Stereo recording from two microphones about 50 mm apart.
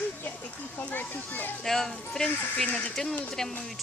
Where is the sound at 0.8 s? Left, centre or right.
Left.